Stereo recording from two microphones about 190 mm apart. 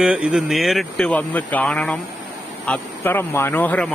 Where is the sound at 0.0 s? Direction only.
5° right (ahead or behind).